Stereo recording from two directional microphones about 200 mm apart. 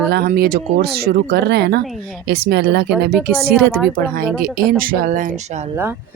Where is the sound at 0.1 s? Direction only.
55° right (ahead or behind).